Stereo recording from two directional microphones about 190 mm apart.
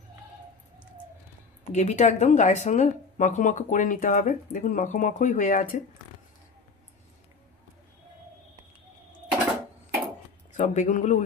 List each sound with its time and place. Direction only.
1.7 s speech: 40° left (ahead or behind)
10.5 s speech: 40° left (ahead or behind)